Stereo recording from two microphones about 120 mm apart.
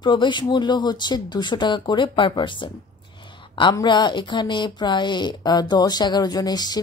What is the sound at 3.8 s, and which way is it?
Speech, 40° left (ahead or behind).